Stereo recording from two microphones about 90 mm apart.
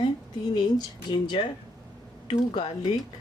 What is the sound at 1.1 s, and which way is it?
A woman's voice, 60° left (ahead or behind).